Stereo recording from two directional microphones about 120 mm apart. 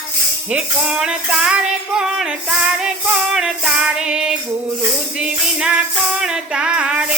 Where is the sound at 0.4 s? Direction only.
5° right (ahead or behind).